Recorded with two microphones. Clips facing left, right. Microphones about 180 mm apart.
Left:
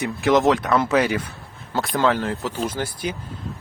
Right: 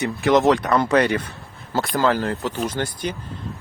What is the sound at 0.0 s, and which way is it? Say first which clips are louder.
Speech: right 1 dB; centre (ahead or behind).